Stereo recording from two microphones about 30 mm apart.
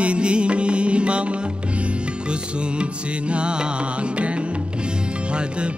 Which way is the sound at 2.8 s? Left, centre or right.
Right.